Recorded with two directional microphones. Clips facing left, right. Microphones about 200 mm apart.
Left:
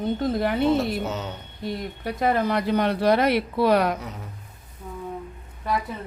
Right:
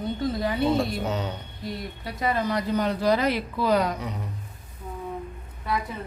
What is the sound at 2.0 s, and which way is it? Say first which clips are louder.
A woman's voice: left 4 dB; 55° left (ahead or behind).